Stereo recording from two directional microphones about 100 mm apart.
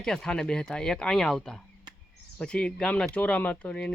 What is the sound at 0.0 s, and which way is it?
Speech, 5° left (ahead or behind).